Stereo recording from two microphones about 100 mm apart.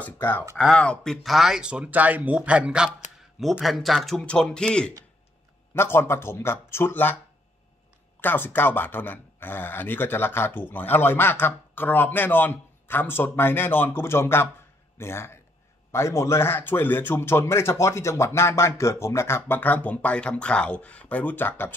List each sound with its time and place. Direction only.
0.0 s speech: 20° left (ahead or behind)
0.6 s speech: 10° left (ahead or behind); by 2.9 s 10° right (ahead or behind)
3.3 s speech: centre (ahead or behind)
5.8 s speech: 25° left (ahead or behind)
8.2 s speech: 20° left (ahead or behind)